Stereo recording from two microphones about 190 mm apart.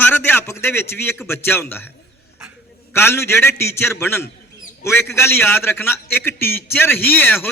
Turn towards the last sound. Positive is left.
turn(degrees=10)  # may be behind; listen again after turning